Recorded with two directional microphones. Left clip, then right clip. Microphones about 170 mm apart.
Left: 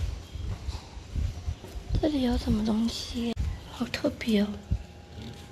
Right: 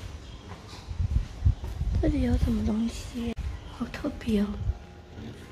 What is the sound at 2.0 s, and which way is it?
A woman's voice, centre (ahead or behind).